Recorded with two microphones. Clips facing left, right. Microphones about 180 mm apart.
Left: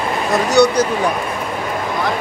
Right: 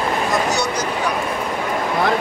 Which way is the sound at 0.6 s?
65° left (ahead or behind).